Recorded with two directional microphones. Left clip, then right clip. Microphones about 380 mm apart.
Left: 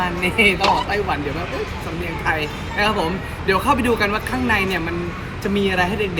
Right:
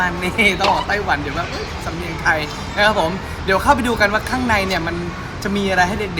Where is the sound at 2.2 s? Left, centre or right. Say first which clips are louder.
Right 4 dB; centre.